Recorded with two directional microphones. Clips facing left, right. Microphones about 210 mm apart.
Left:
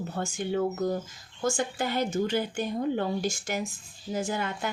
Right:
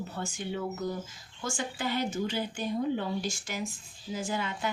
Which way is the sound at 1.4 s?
45° left (ahead or behind).